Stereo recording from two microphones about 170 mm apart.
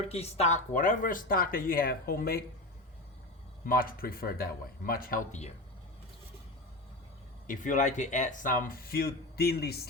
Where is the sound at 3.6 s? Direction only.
60° left (ahead or behind).